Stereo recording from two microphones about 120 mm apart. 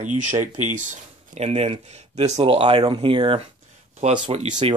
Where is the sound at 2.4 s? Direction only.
50° right (ahead or behind).